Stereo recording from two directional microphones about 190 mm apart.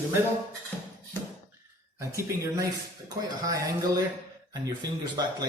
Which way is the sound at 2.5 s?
20° right (ahead or behind).